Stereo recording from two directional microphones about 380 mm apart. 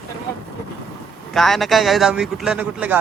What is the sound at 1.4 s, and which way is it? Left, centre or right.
Speech, centre.